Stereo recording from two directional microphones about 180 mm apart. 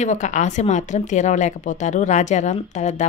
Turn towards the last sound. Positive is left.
turn(degrees=40)  # may be behind; listen again after turning